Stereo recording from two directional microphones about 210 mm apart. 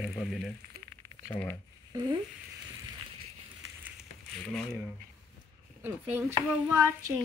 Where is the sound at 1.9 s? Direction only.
20° right (ahead or behind).